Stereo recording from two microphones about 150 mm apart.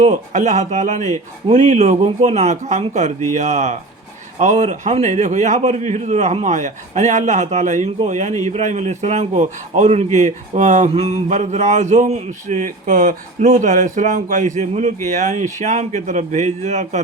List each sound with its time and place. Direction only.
0.0 s a man's voice: 50° right (ahead or behind)